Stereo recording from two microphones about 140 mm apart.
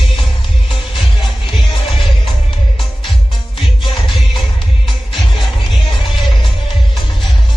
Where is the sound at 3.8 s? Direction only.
35° left (ahead or behind).